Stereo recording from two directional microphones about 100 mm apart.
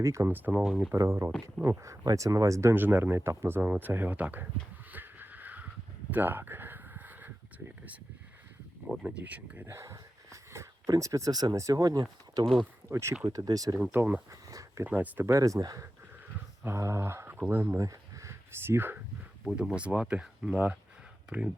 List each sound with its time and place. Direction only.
0.0 s speech: 30° right (ahead or behind)
0.6 s speech: 5° right (ahead or behind)
0.9 s speech: 30° right (ahead or behind)
4.9 s a sound: 15° right (ahead or behind)
9.0 s speech: 15° right (ahead or behind)
9.6 s speech: 30° right (ahead or behind)
12.9 s speech: 30° right (ahead or behind)
13.2 s speech: 40° right (ahead or behind)
13.9 s speech: 15° right (ahead or behind)
14.5 s a sound: 35° right (ahead or behind)
14.8 s speech: 15° right (ahead or behind)
19.5 s speech: 5° right (ahead or behind)